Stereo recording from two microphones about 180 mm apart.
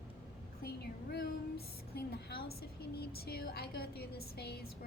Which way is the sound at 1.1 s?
60° left (ahead or behind).